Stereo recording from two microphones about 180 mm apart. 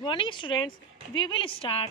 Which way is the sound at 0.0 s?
25° left (ahead or behind).